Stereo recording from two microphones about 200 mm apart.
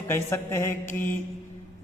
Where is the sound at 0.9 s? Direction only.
40° left (ahead or behind).